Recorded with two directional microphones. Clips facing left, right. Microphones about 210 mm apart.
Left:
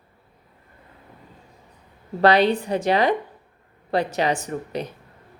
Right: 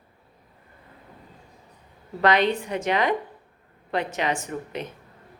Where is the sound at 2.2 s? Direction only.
35° left (ahead or behind).